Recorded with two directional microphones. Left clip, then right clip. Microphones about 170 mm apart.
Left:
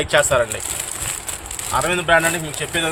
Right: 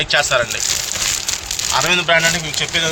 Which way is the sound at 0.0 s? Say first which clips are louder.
Right 1 dB; 60° left (ahead or behind).